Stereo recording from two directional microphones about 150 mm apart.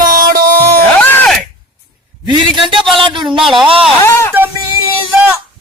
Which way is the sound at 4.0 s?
15° left (ahead or behind).